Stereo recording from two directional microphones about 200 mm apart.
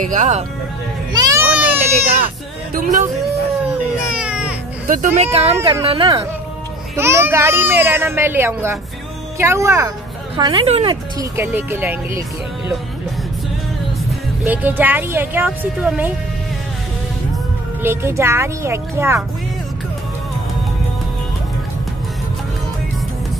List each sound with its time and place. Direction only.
0.0 s speech: 40° right (ahead or behind)
1.1 s music: 15° right (ahead or behind)
2.2 s speech: 45° right (ahead or behind)
4.1 s music: 5° right (ahead or behind)
4.8 s speech: 40° right (ahead or behind); by 6.2 s 25° right (ahead or behind)
7.0 s a child's voice: 15° right (ahead or behind)
11.3 s a child's voice: 10° right (ahead or behind)
14.4 s a child's voice: 10° right (ahead or behind)
17.8 s a child's voice: 10° right (ahead or behind)